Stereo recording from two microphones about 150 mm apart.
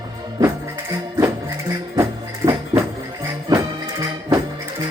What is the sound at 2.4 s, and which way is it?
Music, 25° right (ahead or behind).